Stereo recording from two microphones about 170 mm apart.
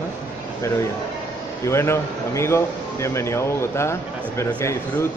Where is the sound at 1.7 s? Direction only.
15° left (ahead or behind).